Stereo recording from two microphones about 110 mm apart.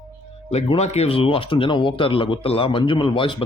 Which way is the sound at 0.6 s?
70° left (ahead or behind).